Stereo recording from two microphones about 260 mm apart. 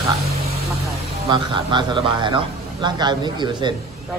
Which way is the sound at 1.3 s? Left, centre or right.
Centre.